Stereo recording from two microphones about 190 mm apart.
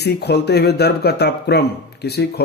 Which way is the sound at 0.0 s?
60° left (ahead or behind).